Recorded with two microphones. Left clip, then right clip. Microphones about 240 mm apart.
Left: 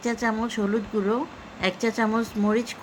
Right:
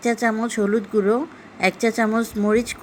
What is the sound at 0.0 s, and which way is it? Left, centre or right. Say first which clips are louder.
A woman's voice: right 5 dB; centre.